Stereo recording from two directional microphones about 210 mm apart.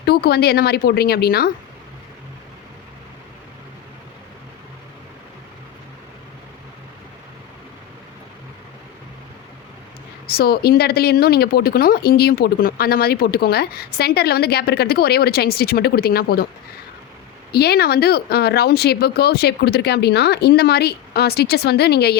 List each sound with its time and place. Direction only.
0.0 s speech: 50° left (ahead or behind)
10.2 s speech: 50° left (ahead or behind)
17.5 s speech: 50° left (ahead or behind)